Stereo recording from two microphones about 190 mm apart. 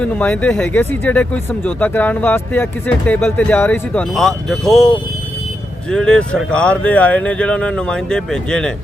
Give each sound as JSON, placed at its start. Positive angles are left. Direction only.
{"t": 0.0, "sound": "speech", "side_deg": 10}